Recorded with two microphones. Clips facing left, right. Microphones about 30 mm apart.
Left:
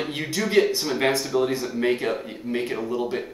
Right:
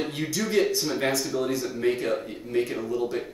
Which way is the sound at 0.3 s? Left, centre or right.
Left.